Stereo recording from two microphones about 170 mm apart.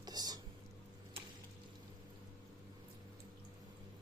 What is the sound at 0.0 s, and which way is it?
Whispering, 25° right (ahead or behind).